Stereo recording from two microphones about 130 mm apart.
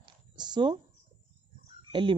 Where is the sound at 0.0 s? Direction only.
35° right (ahead or behind).